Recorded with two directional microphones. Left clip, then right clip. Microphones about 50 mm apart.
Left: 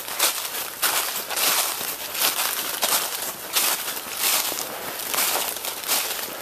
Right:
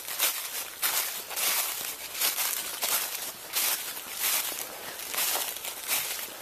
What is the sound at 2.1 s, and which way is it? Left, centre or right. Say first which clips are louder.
Crumpling: left 7 dB; right.